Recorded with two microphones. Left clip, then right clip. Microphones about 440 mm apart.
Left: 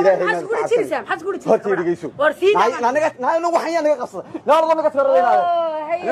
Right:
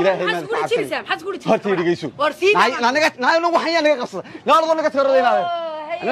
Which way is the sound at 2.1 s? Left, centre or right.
Centre.